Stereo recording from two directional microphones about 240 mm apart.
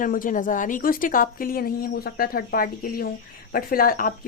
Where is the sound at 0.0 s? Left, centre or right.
Left.